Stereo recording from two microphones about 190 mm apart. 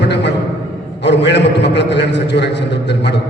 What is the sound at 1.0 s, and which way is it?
A man's voice, 65° left (ahead or behind).